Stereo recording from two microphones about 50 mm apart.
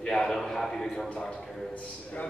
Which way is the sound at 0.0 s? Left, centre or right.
Centre.